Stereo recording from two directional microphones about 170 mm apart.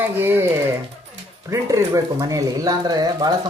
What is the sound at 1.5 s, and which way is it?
Speech, 20° right (ahead or behind).